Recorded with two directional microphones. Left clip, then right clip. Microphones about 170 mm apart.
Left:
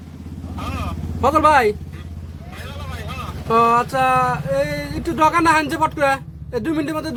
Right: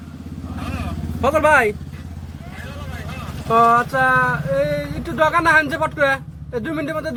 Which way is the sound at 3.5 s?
25° left (ahead or behind).